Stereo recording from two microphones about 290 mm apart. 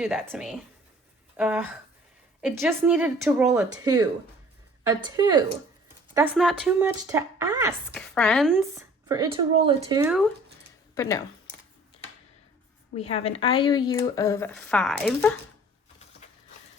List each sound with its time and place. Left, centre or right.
0.0 s speech: centre
6.3 s speech: centre
7.9 s speech: centre
8.7 s speech: centre
10.9 s speech: centre
12.9 s a woman's voice: left; by 15.3 s centre
16.2 s a sound: left